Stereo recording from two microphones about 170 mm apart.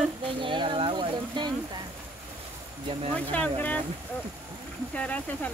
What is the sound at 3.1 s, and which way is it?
Speech, 5° left (ahead or behind).